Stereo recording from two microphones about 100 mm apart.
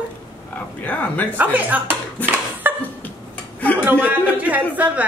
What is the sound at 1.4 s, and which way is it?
Speech, 15° right (ahead or behind).